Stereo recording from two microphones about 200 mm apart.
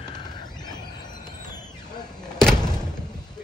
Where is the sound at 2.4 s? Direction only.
5° left (ahead or behind).